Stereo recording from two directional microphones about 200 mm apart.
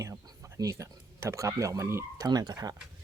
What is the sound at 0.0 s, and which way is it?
Speech, 15° right (ahead or behind).